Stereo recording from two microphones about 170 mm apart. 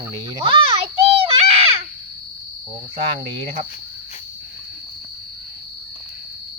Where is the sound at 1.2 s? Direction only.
35° right (ahead or behind).